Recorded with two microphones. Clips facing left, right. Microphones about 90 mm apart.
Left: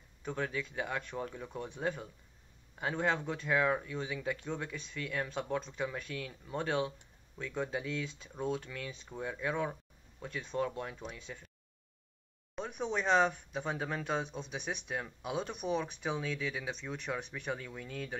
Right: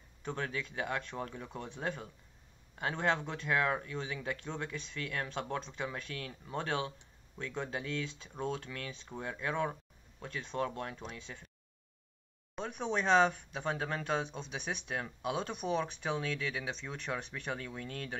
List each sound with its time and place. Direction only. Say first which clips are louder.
0.2 s speech: left 1 dB; 5° left (ahead or behind)
12.5 s speech: right 1 dB; 5° left (ahead or behind)